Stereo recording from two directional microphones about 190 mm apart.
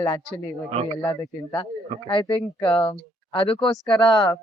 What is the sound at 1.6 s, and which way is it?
A woman's voice, 25° left (ahead or behind).